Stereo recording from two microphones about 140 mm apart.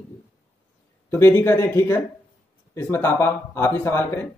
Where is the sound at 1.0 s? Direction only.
15° left (ahead or behind).